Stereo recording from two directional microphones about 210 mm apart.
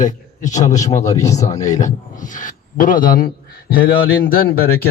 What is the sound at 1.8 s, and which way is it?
Speech, 40° left (ahead or behind).